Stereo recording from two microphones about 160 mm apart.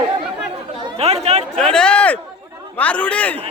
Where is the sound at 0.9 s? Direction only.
40° right (ahead or behind).